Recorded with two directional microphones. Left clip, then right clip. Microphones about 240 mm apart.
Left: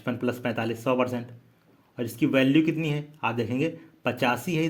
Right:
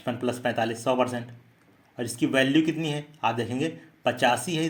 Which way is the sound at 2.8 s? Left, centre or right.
Left.